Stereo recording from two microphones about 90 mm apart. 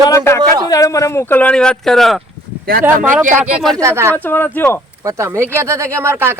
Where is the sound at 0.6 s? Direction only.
40° left (ahead or behind); by 1.5 s 25° left (ahead or behind).